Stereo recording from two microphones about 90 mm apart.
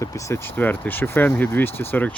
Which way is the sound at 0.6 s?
20° left (ahead or behind).